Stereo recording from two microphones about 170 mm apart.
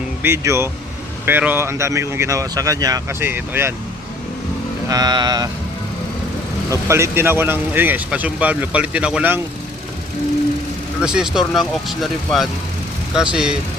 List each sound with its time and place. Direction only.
0.2 s speech: 15° right (ahead or behind)
4.9 s speech: 25° right (ahead or behind)
6.7 s speech: 15° right (ahead or behind)
11.0 s speech: 5° right (ahead or behind)